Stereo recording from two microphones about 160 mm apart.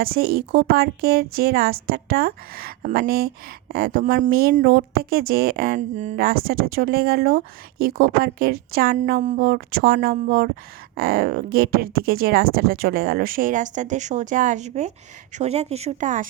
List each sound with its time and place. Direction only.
0.0 s speech: 70° right (ahead or behind)
6.1 s speech: 70° right (ahead or behind); by 16.2 s 50° right (ahead or behind)